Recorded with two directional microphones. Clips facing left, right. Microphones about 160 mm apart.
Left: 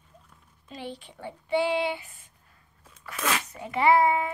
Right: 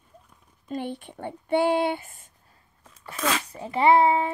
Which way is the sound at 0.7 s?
55° right (ahead or behind).